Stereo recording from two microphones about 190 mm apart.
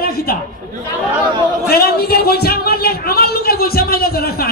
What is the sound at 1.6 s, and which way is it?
A woman's voice, 55° left (ahead or behind).